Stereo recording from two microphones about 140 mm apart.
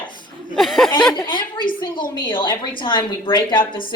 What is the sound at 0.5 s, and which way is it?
Speech, centre (ahead or behind).